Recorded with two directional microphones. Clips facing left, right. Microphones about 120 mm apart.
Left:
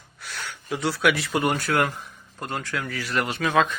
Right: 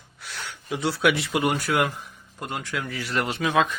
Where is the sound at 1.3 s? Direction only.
10° right (ahead or behind).